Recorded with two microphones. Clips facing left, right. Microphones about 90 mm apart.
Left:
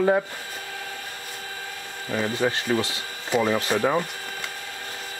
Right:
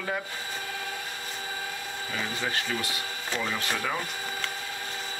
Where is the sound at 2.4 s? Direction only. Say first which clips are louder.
Left 9 dB; 25° left (ahead or behind).